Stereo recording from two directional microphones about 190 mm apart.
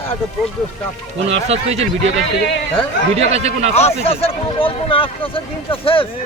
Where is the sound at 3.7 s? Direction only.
35° left (ahead or behind).